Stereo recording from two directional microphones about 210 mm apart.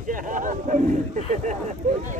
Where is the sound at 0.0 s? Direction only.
40° right (ahead or behind).